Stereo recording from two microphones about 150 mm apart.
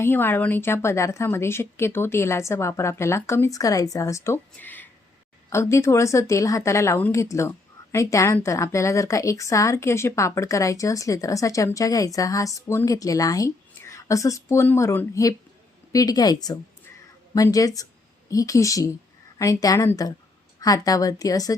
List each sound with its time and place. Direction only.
0.0 s a woman's voice: 15° left (ahead or behind)